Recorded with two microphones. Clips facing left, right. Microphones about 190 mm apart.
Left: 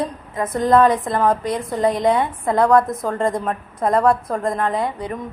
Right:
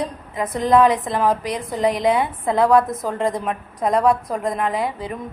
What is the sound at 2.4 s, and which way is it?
Speech, 20° right (ahead or behind).